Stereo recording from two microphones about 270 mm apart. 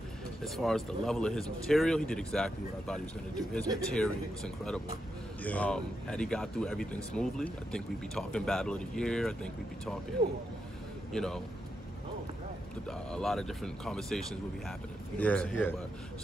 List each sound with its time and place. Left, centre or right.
0.4 s speech: centre
11.1 s speech: centre
13.1 s speech: centre